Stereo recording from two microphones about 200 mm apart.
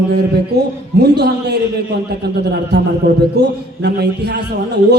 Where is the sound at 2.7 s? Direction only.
55° right (ahead or behind).